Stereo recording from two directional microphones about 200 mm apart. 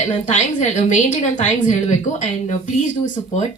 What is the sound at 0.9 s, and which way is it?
Speech, 35° left (ahead or behind).